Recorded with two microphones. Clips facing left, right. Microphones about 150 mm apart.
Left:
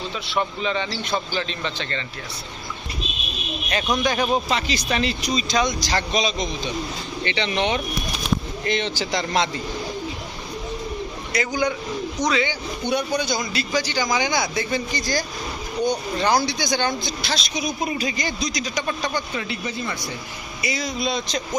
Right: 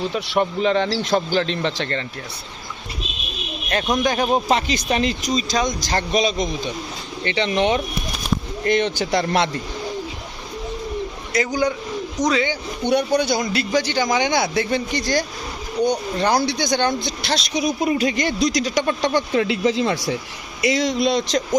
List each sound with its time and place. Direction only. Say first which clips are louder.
0.1 s speech: right 5 dB; 60° right (ahead or behind)
4.0 s speech: right 2 dB; 45° right (ahead or behind)
4.9 s a man's voice: right 3 dB; 40° right (ahead or behind); by 9.6 s 60° right (ahead or behind)
11.3 s speech: right 3 dB; 40° right (ahead or behind)
12.9 s a man's voice: right 5 dB; 65° right (ahead or behind)
15.8 s speech: right 3 dB; 35° right (ahead or behind)
16.1 s a man's voice: right 2 dB; 55° right (ahead or behind); by 21.3 s 80° right